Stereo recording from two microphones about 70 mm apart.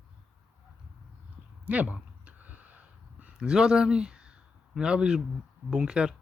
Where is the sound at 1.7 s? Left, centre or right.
Centre.